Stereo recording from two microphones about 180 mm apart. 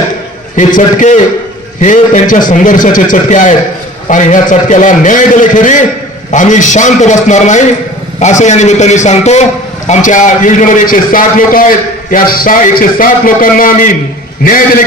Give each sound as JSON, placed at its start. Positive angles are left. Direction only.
{"t": 0.5, "sound": "a man's voice", "side_deg": 45}